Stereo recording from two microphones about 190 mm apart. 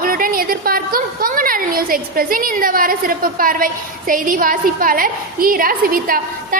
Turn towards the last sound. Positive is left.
turn(degrees=-50)  # may be behind; listen again after turning